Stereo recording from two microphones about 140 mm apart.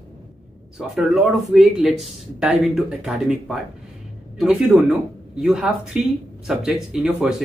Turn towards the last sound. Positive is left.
turn(degrees=-5)  # may be behind; listen again after turning